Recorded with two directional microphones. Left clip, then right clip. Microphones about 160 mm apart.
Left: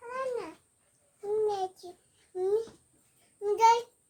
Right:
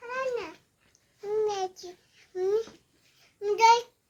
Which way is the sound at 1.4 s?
35° left (ahead or behind).